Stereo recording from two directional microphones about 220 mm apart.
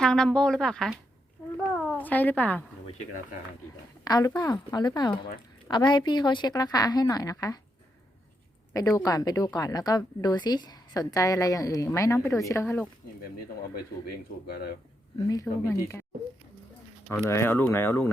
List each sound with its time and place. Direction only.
0.0 s speech: 5° left (ahead or behind)
4.0 s a woman's voice: 15° left (ahead or behind)
8.7 s a woman's voice: 15° left (ahead or behind)
13.7 s speech: 45° left (ahead or behind)
15.3 s a woman's voice: 15° left (ahead or behind)
17.1 s a woman's voice: 10° left (ahead or behind)